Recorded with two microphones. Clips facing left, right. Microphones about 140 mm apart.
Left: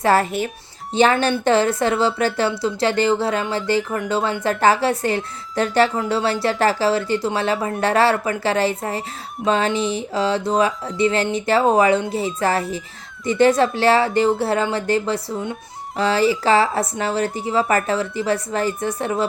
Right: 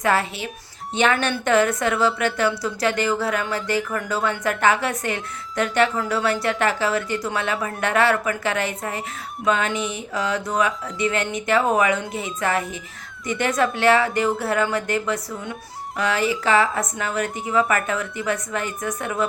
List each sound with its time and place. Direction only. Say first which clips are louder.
0.0 s speech: left 4 dB; 40° left (ahead or behind)
0.9 s a woman's voice: left 4 dB; 30° left (ahead or behind)